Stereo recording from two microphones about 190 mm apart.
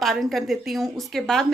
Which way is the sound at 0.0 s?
Centre (ahead or behind).